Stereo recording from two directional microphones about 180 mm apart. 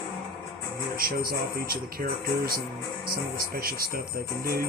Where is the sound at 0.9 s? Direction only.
55° right (ahead or behind).